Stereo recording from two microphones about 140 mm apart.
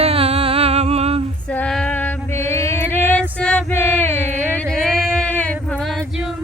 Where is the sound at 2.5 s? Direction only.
15° left (ahead or behind).